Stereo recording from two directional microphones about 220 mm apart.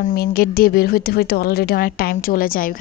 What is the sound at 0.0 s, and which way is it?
A woman's voice, 45° left (ahead or behind).